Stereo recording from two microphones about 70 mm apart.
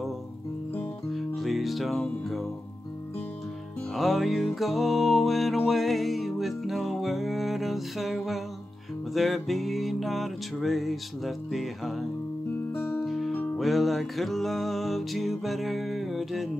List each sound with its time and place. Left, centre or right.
1.1 s music: centre
3.9 s music: centre
12.7 s music: left
13.0 s music: centre